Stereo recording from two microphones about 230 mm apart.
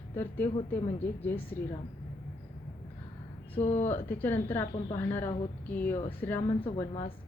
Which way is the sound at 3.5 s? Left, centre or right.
Left.